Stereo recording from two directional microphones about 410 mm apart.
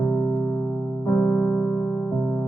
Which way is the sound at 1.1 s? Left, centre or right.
Centre.